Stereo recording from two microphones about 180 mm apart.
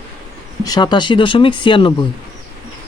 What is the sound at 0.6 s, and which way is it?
Speech, 20° left (ahead or behind).